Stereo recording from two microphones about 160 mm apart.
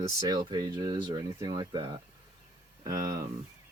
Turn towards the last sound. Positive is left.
turn(degrees=-20)  # may be behind; listen again after turning